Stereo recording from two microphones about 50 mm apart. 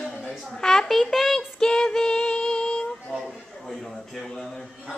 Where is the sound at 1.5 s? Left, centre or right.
Centre.